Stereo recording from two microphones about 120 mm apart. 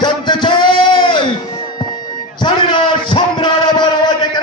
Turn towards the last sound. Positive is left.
turn(degrees=40)  # may be behind; listen again after turning